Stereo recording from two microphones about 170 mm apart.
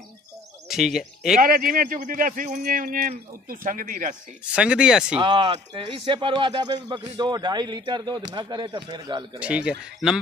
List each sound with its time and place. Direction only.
0.7 s speech: centre (ahead or behind)
1.4 s speech: 55° right (ahead or behind)
4.5 s speech: 5° right (ahead or behind)
5.2 s a man's voice: 25° right (ahead or behind)
9.4 s speech: 5° right (ahead or behind)